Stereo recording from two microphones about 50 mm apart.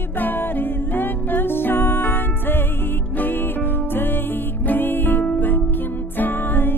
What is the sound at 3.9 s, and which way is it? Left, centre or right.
Music, left.